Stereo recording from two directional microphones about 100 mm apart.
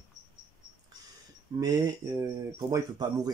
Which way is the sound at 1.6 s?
40° right (ahead or behind).